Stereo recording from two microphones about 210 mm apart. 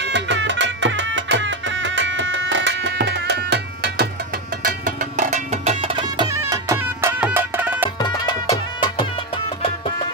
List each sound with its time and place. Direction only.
0.1 s music: 60° right (ahead or behind)
4.6 s music: 40° right (ahead or behind); by 7.9 s 10° right (ahead or behind)
8.0 s music: 20° left (ahead or behind)